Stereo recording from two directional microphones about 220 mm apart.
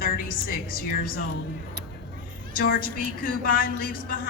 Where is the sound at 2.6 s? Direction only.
40° left (ahead or behind).